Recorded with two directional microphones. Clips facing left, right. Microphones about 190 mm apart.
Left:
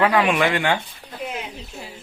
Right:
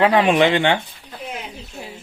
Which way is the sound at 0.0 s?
30° right (ahead or behind).